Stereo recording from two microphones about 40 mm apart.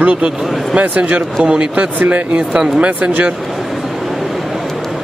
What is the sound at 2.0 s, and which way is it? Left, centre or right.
Speech, right.